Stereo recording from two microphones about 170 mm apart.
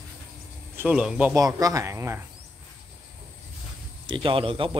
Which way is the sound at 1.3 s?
20° right (ahead or behind).